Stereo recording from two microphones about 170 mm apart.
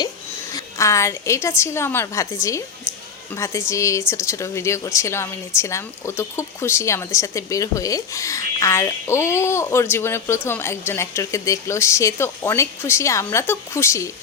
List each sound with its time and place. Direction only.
0.5 s speech: 15° left (ahead or behind)